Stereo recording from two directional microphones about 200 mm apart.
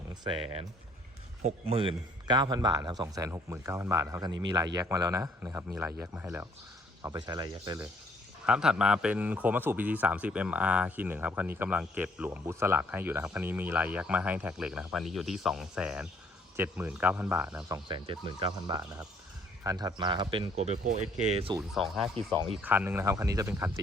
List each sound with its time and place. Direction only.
1.5 s a man's voice: 30° right (ahead or behind)
8.4 s a man's voice: 5° right (ahead or behind)
17.8 s speech: 25° right (ahead or behind)
20.6 s speech: 35° right (ahead or behind)
22.6 s a man's voice: 10° right (ahead or behind)